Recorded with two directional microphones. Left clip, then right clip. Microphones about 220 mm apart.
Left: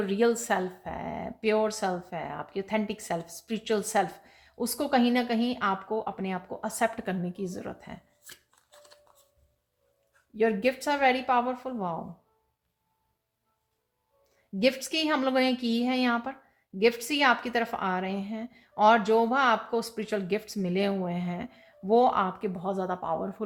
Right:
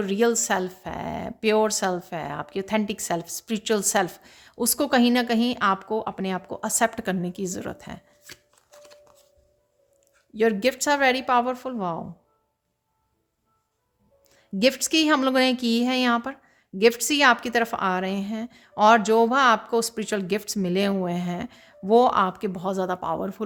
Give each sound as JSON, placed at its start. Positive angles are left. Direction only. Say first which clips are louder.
{"t": 0.0, "sound": "speech", "louder": "right 3 dB", "side_deg": -30}
{"t": 10.3, "sound": "speech", "louder": "right 4 dB", "side_deg": -40}
{"t": 14.3, "sound": "speech", "louder": "right 4 dB", "side_deg": -45}